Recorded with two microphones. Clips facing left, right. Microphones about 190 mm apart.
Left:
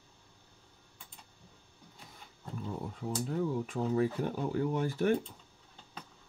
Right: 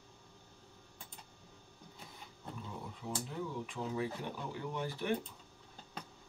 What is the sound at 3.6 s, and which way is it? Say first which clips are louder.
Speech: left 8 dB; 45° left (ahead or behind).